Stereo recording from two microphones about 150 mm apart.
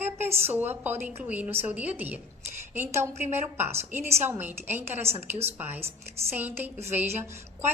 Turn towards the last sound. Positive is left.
turn(degrees=-15)  # may be behind; listen again after turning